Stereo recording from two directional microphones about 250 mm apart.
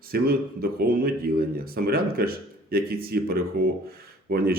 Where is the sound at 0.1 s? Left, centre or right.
Right.